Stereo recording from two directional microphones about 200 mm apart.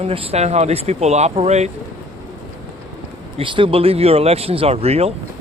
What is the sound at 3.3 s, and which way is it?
Speech, 25° right (ahead or behind).